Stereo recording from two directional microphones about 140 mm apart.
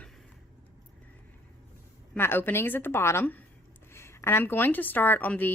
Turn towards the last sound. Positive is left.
turn(degrees=15)  # may be behind; listen again after turning